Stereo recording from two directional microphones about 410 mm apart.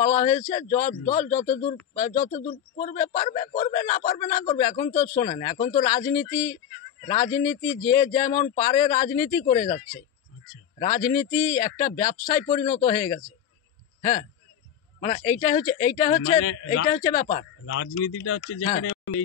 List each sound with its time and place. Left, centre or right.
0.0 s a man's voice: centre
15.0 s a man's voice: centre
17.6 s a man's voice: left